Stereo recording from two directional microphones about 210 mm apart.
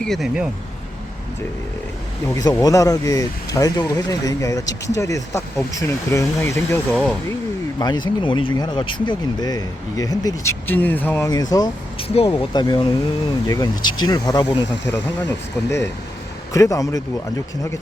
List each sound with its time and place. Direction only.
0.0 s speech: centre (ahead or behind)
2.3 s speech: 15° left (ahead or behind)
7.8 s speech: 20° left (ahead or behind)